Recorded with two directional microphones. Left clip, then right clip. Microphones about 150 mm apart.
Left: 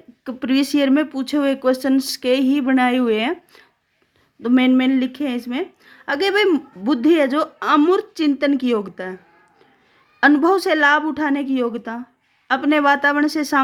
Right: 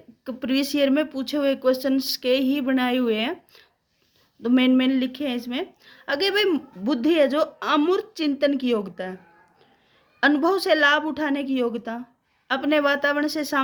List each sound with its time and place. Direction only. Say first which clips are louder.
0.3 s speech: left 5 dB; 25° left (ahead or behind)
4.4 s a woman's voice: left 3 dB; 20° left (ahead or behind)
10.2 s a woman's voice: left 5 dB; 30° left (ahead or behind)